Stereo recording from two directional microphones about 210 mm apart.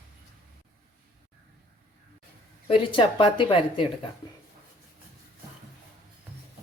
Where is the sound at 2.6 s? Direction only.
25° left (ahead or behind).